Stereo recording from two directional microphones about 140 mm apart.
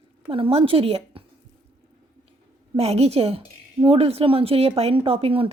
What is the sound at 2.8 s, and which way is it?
Speech, 45° right (ahead or behind).